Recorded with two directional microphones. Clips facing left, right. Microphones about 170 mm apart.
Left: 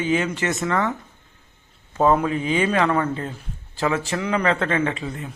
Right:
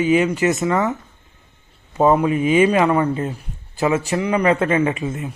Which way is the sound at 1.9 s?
10° right (ahead or behind).